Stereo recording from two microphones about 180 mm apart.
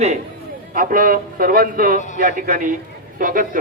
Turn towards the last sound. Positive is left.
turn(degrees=-50)  # may be behind; listen again after turning